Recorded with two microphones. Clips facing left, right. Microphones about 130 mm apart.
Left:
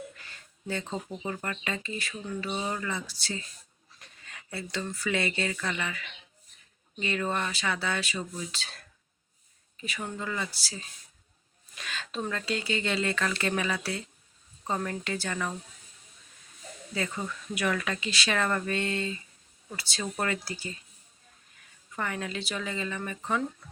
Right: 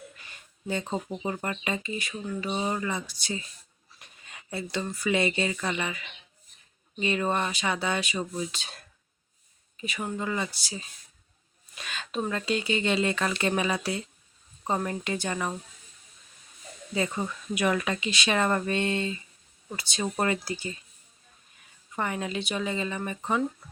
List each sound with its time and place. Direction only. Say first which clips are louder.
0.2 s speech: right 1 dB; 15° right (ahead or behind)
9.8 s speech: right 4 dB; 20° right (ahead or behind)
16.9 s speech: right 4 dB; 20° right (ahead or behind)
21.9 s speech: right 3 dB; 20° right (ahead or behind)